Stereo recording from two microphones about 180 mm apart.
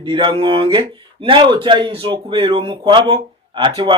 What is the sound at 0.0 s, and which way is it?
A man's voice, 25° right (ahead or behind).